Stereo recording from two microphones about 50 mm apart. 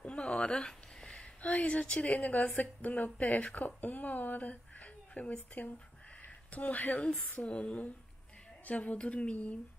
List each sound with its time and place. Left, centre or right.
0.0 s a sound: left
1.4 s a woman's voice: left
7.1 s a woman's voice: centre